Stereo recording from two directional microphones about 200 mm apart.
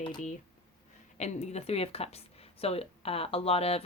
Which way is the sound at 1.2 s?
35° left (ahead or behind).